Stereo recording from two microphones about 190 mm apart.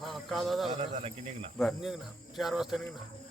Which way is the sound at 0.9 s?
30° right (ahead or behind).